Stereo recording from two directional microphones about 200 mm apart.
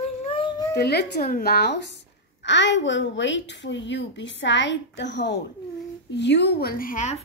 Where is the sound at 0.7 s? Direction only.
55° left (ahead or behind).